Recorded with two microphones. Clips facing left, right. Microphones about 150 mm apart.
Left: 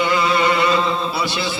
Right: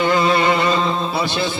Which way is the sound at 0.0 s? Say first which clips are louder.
Right 2 dB; 45° right (ahead or behind).